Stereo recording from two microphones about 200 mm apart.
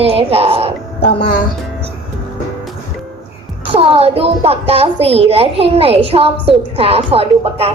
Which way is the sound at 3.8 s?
30° right (ahead or behind).